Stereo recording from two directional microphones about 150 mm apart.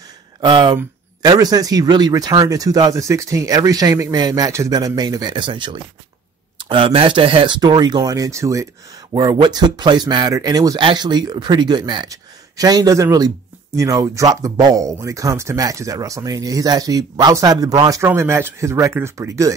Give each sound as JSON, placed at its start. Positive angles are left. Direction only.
{"t": 0.4, "sound": "speech", "side_deg": -30}